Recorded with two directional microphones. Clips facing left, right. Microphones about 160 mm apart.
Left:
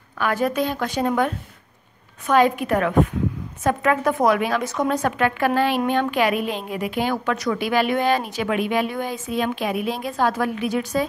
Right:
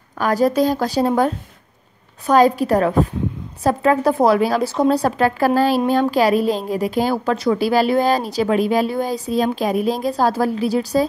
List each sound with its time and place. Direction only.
0.2 s a woman's voice: 35° right (ahead or behind)